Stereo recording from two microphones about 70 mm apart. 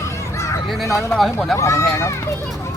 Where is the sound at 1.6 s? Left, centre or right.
Left.